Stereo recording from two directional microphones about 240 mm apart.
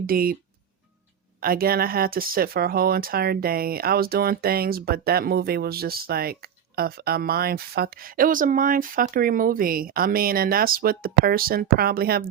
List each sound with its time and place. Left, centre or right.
0.0 s speech: right
1.4 s speech: right